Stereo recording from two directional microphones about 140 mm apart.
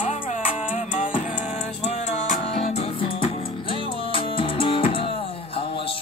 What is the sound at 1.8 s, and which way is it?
Music, 50° left (ahead or behind).